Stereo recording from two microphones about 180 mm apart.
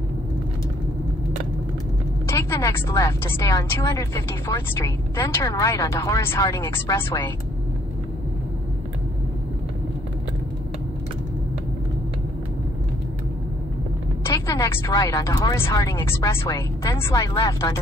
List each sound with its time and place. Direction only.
2.2 s a sound: 15° left (ahead or behind)
3.3 s a woman's voice: 20° left (ahead or behind)
14.2 s a woman's voice: 15° left (ahead or behind)